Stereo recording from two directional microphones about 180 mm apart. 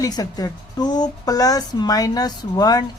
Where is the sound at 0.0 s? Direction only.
20° left (ahead or behind).